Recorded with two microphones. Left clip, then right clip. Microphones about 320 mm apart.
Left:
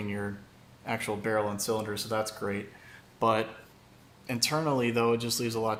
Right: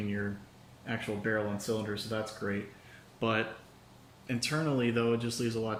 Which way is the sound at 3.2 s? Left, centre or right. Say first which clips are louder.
Left 5 dB; centre.